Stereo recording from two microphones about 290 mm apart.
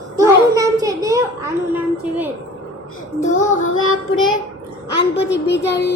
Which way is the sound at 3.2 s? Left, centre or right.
Left.